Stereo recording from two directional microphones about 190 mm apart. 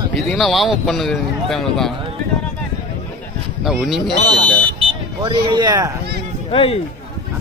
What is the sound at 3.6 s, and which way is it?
Speech, centre (ahead or behind).